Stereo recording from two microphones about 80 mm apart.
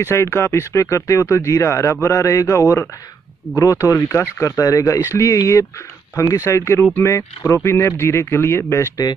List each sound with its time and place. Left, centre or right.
0.0 s speech: left